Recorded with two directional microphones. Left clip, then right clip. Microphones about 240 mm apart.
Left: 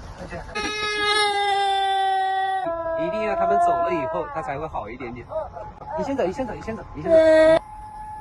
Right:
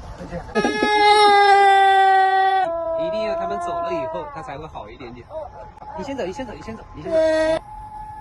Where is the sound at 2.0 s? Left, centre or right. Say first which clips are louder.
Right 7 dB; right.